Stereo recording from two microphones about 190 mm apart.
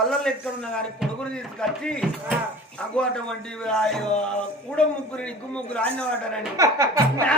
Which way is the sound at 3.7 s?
5° left (ahead or behind).